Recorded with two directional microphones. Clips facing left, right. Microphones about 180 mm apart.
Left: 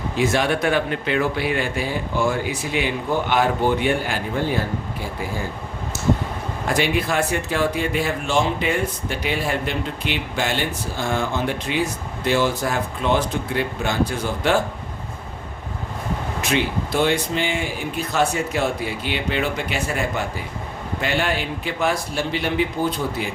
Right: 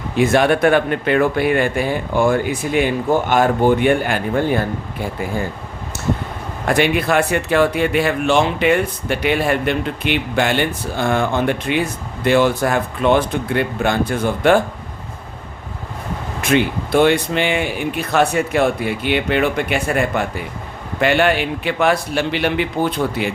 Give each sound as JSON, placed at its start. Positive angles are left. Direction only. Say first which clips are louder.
{"t": 0.2, "sound": "speech", "louder": "right 6 dB", "side_deg": -55}
{"t": 6.7, "sound": "speech", "louder": "right 5 dB", "side_deg": -60}
{"t": 16.4, "sound": "speech", "louder": "right 6 dB", "side_deg": -55}